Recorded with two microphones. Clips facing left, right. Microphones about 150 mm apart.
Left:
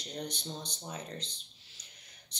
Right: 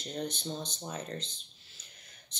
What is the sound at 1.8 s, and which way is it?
Whispering, 15° left (ahead or behind).